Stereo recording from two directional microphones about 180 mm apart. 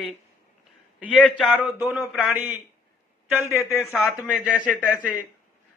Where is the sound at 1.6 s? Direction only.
10° right (ahead or behind).